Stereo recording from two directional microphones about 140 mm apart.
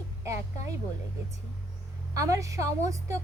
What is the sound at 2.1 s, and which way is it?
Speech, 20° right (ahead or behind).